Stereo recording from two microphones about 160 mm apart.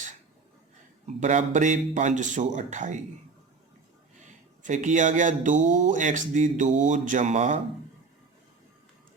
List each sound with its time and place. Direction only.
1.0 s speech: 50° right (ahead or behind)
4.6 s speech: 50° right (ahead or behind)